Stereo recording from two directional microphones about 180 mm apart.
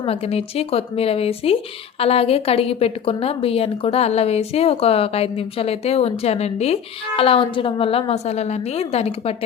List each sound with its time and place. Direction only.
0.0 s a woman's voice: 35° left (ahead or behind)